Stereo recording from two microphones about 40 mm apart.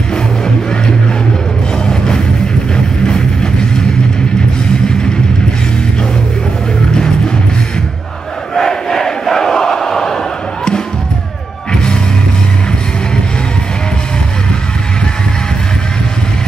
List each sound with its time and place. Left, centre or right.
2.7 s vehicle: left
8.5 s crowd: centre
11.7 s music: centre